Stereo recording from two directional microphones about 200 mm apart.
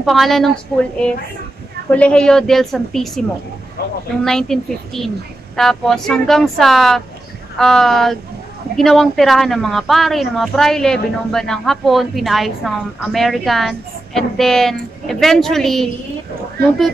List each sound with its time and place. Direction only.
0.0 s speech: centre (ahead or behind)
1.9 s speech: 5° left (ahead or behind)
3.8 s speech: 50° left (ahead or behind)
4.2 s speech: centre (ahead or behind)
16.6 s speech: 50° right (ahead or behind)